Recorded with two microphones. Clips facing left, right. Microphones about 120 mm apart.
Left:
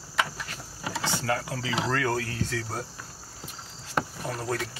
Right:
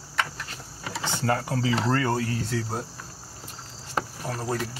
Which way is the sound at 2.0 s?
10° right (ahead or behind).